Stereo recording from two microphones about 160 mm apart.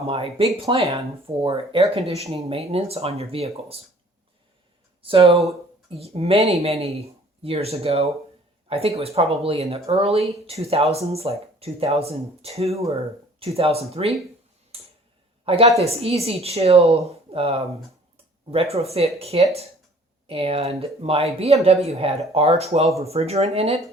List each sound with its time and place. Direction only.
0.1 s speech: 40° right (ahead or behind)
5.0 s speech: 35° right (ahead or behind)
14.7 s tick-tock: 40° right (ahead or behind)
15.4 s a woman's voice: 35° right (ahead or behind)